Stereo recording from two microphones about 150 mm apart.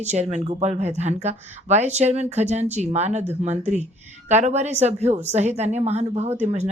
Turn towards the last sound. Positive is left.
turn(degrees=-50)  # may be behind; listen again after turning